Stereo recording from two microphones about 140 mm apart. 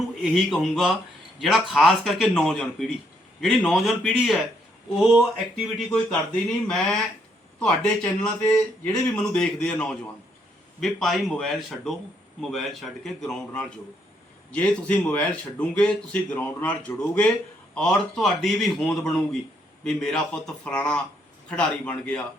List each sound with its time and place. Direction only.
0.2 s a man's voice: centre (ahead or behind)
7.6 s a man's voice: 5° left (ahead or behind)